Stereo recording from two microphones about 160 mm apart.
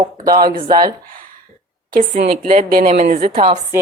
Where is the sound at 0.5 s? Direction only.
25° right (ahead or behind).